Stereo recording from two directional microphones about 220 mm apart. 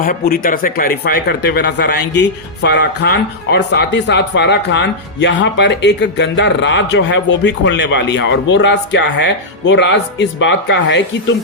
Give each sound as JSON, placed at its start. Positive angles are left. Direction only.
{"t": 0.0, "sound": "speech", "side_deg": 40}